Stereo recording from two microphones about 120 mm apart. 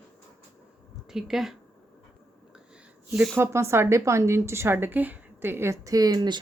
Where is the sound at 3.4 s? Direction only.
20° right (ahead or behind).